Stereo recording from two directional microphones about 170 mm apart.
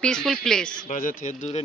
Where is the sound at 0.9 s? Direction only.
50° left (ahead or behind).